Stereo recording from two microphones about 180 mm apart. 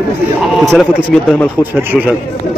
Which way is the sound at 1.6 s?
10° right (ahead or behind).